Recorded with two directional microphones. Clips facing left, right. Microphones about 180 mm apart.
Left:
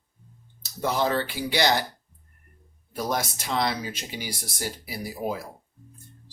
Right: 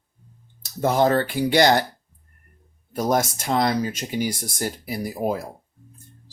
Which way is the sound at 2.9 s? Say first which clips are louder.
Right 7 dB; 50° right (ahead or behind).